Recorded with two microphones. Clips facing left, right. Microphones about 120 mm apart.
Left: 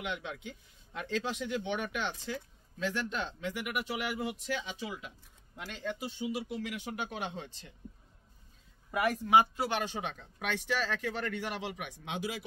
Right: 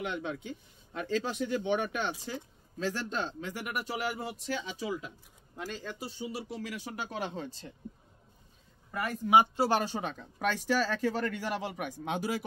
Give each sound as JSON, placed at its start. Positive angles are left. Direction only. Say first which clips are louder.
{"t": 0.0, "sound": "speech", "louder": "right 3 dB", "side_deg": -40}
{"t": 9.6, "sound": "speech", "louder": "right 5 dB", "side_deg": -35}